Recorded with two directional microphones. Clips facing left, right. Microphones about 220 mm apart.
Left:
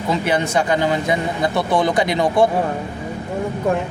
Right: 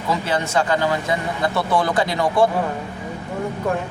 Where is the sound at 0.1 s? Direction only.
15° left (ahead or behind).